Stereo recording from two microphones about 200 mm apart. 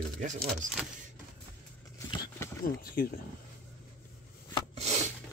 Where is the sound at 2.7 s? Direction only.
45° left (ahead or behind).